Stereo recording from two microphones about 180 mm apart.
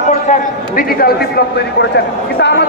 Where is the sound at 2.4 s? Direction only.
70° left (ahead or behind).